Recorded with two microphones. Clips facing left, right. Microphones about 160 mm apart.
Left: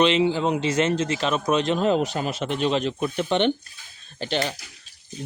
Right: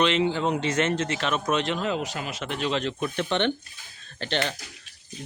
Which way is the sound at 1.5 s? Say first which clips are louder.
Left 4 dB; 15° left (ahead or behind).